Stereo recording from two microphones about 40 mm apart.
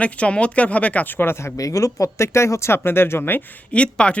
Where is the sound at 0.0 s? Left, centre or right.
Left.